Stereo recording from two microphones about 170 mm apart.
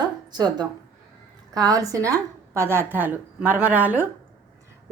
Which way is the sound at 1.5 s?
20° right (ahead or behind).